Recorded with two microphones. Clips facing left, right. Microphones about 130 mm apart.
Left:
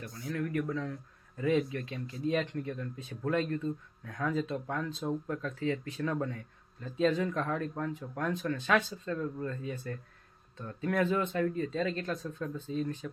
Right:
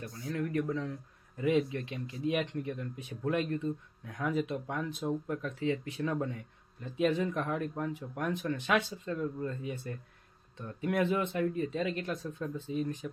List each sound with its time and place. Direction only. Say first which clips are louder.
0.0 s speech: even; 30° right (ahead or behind)